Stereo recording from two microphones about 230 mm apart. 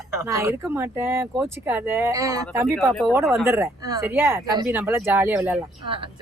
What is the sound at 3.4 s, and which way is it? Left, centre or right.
Speech, centre.